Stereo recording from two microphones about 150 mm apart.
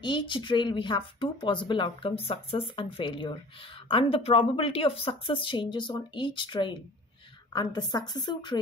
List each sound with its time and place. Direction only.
0.0 s a woman's voice: 30° left (ahead or behind)